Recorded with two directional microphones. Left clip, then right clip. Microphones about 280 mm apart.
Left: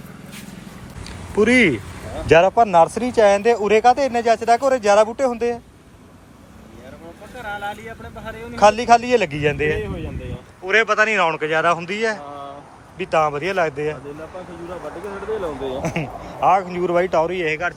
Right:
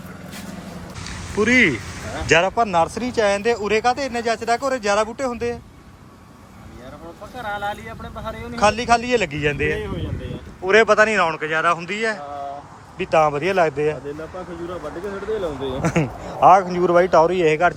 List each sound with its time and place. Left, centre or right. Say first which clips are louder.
1.0 s a sound: left 3 dB; centre
2.2 s speech: left 4 dB; centre
7.4 s speech: right 2 dB; centre
8.5 s speech: left 4 dB; centre
15.8 s speech: right 3 dB; centre